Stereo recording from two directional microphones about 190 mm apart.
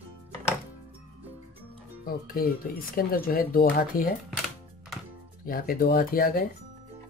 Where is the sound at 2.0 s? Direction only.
50° left (ahead or behind).